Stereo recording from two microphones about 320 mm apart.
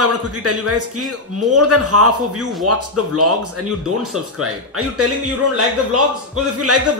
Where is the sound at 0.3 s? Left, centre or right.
Right.